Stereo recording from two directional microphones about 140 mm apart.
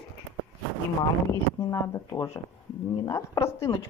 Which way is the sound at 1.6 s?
25° left (ahead or behind).